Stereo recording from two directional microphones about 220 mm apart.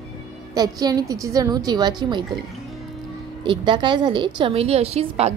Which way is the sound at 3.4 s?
20° right (ahead or behind).